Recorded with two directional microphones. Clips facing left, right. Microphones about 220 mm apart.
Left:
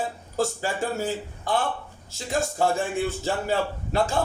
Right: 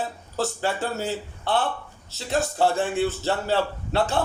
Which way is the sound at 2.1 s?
10° left (ahead or behind).